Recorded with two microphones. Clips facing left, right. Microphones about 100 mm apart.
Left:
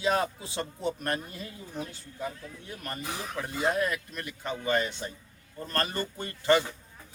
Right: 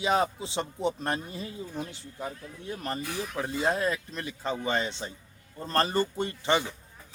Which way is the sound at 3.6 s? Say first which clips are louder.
Even; 25° right (ahead or behind).